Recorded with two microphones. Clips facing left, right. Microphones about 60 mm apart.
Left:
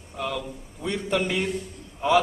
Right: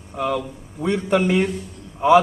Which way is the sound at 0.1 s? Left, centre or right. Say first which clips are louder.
Right 7 dB; centre.